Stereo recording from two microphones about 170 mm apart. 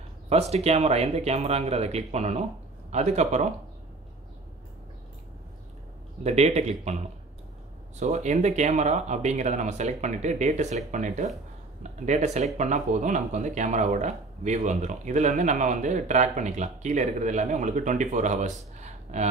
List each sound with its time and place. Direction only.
0.3 s speech: 40° right (ahead or behind)
6.2 s speech: 40° right (ahead or behind)